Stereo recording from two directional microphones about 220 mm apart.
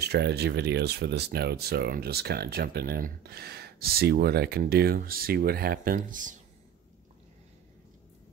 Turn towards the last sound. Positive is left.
turn(degrees=-35)  # may be behind; listen again after turning